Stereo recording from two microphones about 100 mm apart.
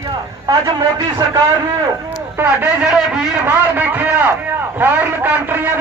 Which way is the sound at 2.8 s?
5° right (ahead or behind).